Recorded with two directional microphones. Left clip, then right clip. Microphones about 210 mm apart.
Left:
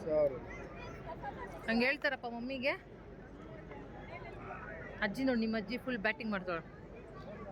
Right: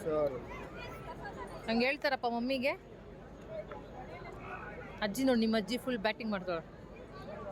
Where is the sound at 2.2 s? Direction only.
30° right (ahead or behind).